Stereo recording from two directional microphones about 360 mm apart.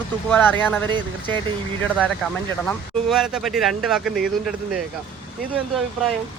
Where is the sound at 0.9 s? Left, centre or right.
Centre.